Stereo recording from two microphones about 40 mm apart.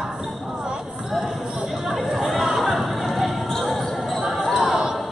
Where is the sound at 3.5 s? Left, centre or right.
Centre.